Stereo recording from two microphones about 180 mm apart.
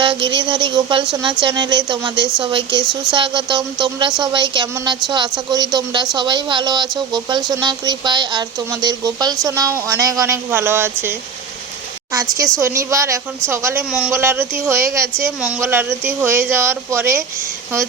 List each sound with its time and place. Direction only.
0.0 s speech: 30° right (ahead or behind)
2.8 s speech: 5° right (ahead or behind)
3.2 s speech: 25° right (ahead or behind)
12.1 s a woman's voice: 20° right (ahead or behind)